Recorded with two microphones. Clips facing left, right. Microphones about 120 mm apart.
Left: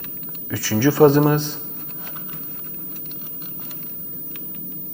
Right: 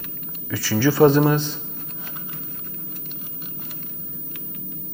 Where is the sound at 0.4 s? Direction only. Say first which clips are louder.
Left 1 dB; 35° left (ahead or behind).